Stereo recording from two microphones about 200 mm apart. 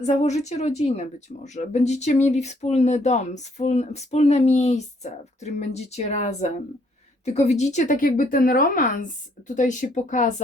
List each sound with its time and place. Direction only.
0.0 s speech: 35° left (ahead or behind)